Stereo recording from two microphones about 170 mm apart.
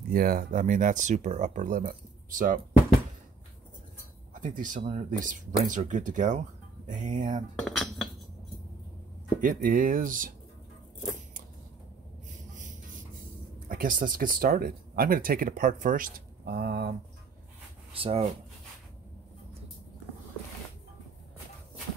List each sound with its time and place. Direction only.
0.1 s speech: 60° right (ahead or behind)
4.3 s speech: 50° right (ahead or behind)
7.6 s cutlery: centre (ahead or behind)
9.4 s speech: 55° right (ahead or behind)
12.5 s a sound: 50° right (ahead or behind)
13.7 s speech: 55° right (ahead or behind)
16.4 s speech: 75° right (ahead or behind)
17.9 s speech: 35° right (ahead or behind)